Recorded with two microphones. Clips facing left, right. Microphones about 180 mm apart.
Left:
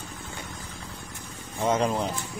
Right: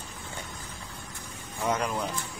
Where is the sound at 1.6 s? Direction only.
25° left (ahead or behind).